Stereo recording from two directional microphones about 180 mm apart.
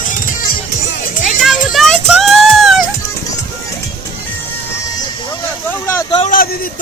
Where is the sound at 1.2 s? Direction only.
Centre (ahead or behind).